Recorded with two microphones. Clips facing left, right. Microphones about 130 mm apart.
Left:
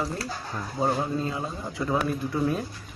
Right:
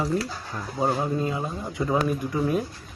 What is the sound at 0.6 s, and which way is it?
Speech, 5° right (ahead or behind).